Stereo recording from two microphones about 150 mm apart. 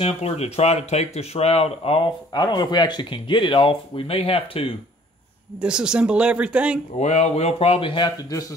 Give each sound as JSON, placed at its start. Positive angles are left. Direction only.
{"t": 0.0, "sound": "speech", "side_deg": 45}
{"t": 5.6, "sound": "speech", "side_deg": -5}
{"t": 7.0, "sound": "speech", "side_deg": 45}